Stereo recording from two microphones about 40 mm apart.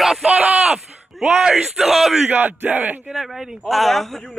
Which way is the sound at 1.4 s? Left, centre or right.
Centre.